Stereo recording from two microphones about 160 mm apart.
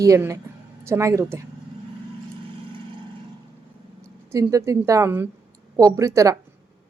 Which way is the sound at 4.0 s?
20° right (ahead or behind).